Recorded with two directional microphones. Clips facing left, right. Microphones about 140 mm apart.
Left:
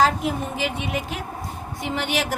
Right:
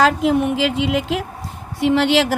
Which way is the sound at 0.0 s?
85° right.